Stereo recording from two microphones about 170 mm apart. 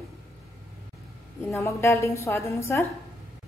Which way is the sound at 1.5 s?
15° left (ahead or behind).